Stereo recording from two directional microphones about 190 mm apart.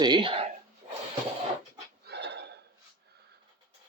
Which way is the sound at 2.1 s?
65° right (ahead or behind).